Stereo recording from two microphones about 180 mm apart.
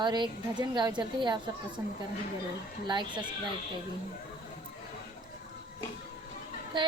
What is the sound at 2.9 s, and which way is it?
Speech, 25° right (ahead or behind).